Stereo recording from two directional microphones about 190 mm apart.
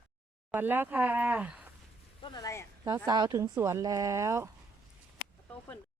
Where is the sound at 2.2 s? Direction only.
20° left (ahead or behind).